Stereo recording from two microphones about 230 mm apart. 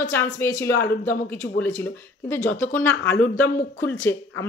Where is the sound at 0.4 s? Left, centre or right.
Centre.